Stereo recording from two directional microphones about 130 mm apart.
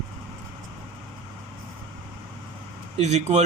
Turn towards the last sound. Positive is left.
turn(degrees=-60)  # may be behind; listen again after turning